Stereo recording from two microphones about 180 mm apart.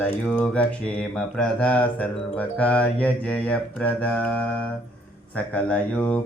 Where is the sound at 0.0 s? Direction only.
5° left (ahead or behind).